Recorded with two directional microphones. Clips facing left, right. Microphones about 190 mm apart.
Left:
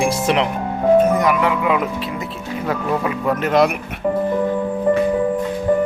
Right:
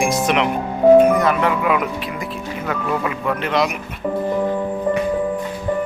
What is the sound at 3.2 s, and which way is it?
Speech, 45° left (ahead or behind).